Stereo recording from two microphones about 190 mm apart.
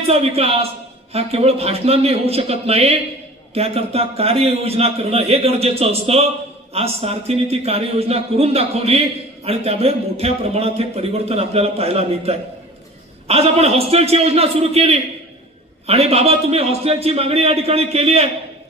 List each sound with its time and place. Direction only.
0.1 s speech: 30° right (ahead or behind)